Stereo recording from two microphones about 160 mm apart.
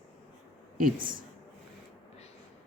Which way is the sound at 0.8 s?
60° right (ahead or behind).